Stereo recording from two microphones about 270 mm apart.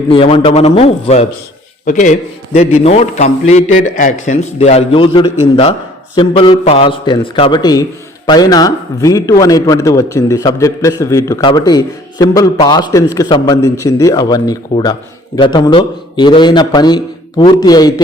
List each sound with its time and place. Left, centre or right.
0.1 s a man's voice: centre